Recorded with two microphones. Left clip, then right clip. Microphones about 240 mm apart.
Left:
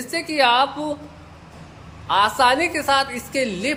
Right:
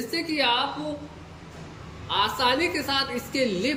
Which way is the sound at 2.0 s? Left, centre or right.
Centre.